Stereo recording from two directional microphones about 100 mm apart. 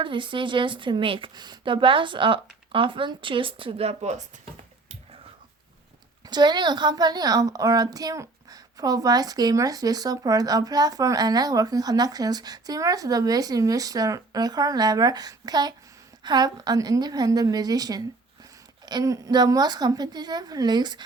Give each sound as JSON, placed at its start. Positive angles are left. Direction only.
{"t": 0.0, "sound": "a woman's voice", "side_deg": -55}
{"t": 6.2, "sound": "a woman's voice", "side_deg": -45}